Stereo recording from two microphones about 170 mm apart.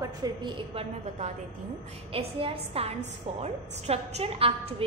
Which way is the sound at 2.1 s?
35° right (ahead or behind).